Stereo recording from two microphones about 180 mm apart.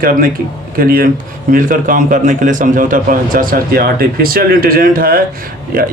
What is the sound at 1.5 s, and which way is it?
A man's voice, 50° right (ahead or behind).